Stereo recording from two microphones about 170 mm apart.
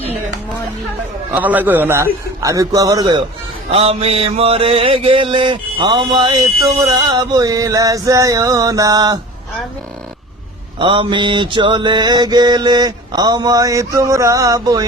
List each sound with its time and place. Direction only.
1.3 s a man's voice: 10° right (ahead or behind)
2.4 s mantra: 20° right (ahead or behind)
3.7 s mantra: 35° right (ahead or behind)
10.8 s mantra: 30° right (ahead or behind)